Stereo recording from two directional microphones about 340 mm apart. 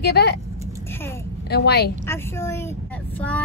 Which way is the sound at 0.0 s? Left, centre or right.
Left.